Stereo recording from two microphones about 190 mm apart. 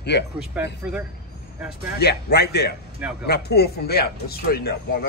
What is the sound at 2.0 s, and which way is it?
Speech, 60° left (ahead or behind).